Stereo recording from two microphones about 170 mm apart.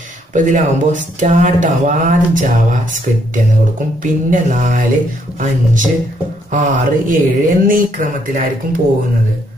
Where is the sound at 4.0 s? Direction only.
50° right (ahead or behind).